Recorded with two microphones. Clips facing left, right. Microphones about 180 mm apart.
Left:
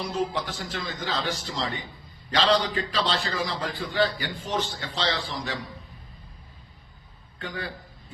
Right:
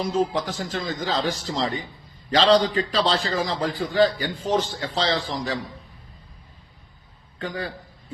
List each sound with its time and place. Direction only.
0.0 s a man's voice: 45° right (ahead or behind)
7.3 s a man's voice: 35° right (ahead or behind)